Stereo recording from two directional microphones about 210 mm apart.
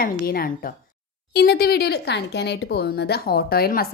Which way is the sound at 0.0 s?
45° left (ahead or behind).